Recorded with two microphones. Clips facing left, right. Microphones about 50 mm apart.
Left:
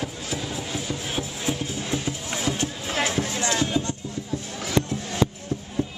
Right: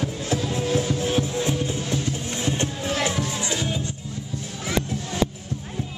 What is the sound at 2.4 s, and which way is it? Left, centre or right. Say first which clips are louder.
Music: right 1 dB; right.